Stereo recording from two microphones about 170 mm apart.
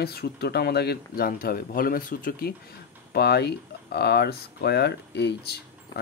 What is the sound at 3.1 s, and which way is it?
Speech, 75° left (ahead or behind).